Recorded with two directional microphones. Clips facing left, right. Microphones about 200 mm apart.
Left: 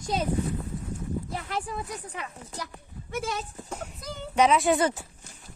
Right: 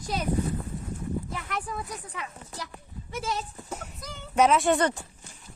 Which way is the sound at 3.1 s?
55° left (ahead or behind).